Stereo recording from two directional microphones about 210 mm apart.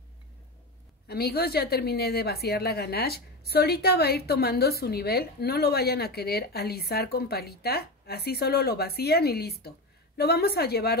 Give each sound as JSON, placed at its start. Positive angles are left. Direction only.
{"t": 1.0, "sound": "a woman's voice", "side_deg": 50}